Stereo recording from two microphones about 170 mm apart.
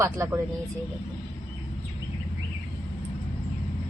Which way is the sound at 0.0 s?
20° right (ahead or behind).